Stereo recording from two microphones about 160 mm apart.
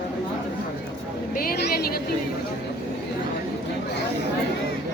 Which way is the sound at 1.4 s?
65° left (ahead or behind).